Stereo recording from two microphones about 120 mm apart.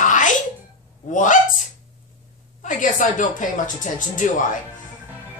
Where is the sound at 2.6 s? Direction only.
90° left.